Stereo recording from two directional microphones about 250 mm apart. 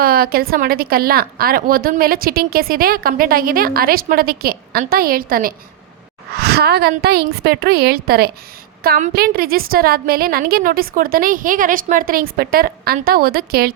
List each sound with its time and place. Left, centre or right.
0.0 s a woman's voice: right